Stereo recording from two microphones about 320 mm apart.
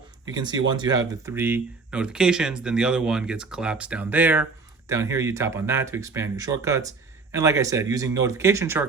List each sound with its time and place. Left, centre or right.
0.3 s speech: centre